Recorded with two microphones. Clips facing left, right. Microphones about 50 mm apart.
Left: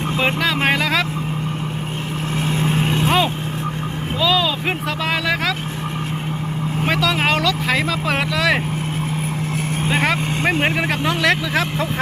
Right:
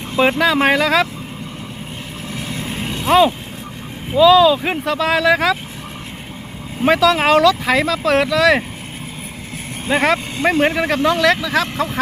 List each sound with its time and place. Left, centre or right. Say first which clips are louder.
0.3 s speech: right 4 dB; centre
2.5 s vehicle: left 6 dB; left
4.2 s speech: right 9 dB; centre
6.8 s speech: right 6 dB; centre
9.9 s speech: right 4 dB; centre
10.4 s speech: right 4 dB; centre